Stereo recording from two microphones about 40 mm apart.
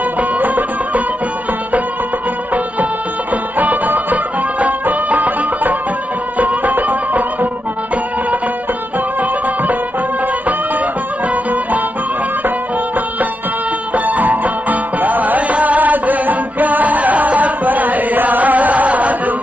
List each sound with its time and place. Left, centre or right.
0.2 s music: right
3.5 s music: right
13.9 s music: right